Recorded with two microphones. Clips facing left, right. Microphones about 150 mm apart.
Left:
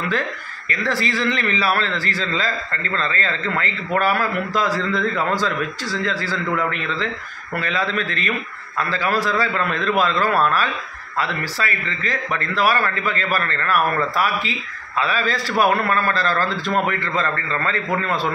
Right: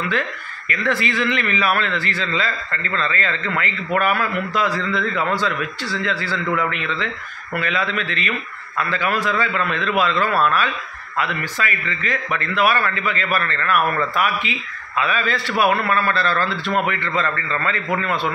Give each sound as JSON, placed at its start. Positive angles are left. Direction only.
{"t": 0.7, "sound": "a man's voice", "side_deg": 35}